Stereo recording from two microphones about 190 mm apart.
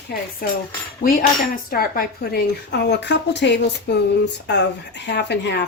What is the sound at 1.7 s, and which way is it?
A woman's voice, 50° left (ahead or behind).